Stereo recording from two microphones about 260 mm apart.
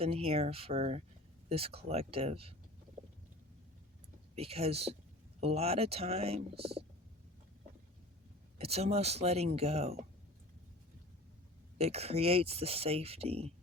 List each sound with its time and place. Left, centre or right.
0.0 s speech: right
4.4 s speech: right
6.6 s speech: right
8.5 s speech: right
11.8 s speech: right